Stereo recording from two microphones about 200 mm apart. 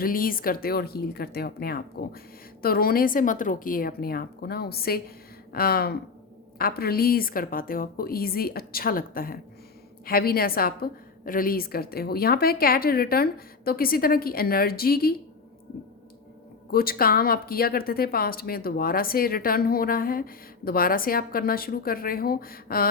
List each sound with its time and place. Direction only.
0.0 s speech: 45° left (ahead or behind)
16.7 s speech: 50° left (ahead or behind)